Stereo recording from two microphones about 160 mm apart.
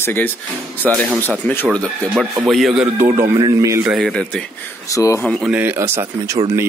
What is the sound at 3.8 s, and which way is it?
Speech, centre (ahead or behind).